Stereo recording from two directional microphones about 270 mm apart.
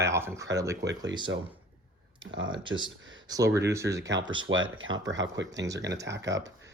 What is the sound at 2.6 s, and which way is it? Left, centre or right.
Speech, centre.